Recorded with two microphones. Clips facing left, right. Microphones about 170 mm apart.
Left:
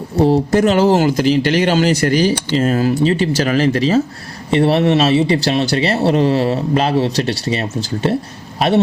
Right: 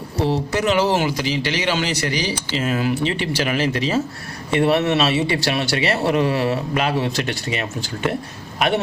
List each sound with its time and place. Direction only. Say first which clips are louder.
0.2 s a man's voice: left 8 dB; 45° left (ahead or behind)